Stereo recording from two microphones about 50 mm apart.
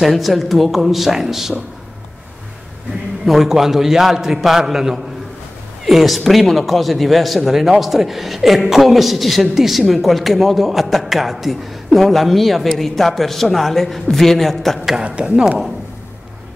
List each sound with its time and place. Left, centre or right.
0.0 s a man's voice: centre
3.3 s a man's voice: centre
15.0 s speech: right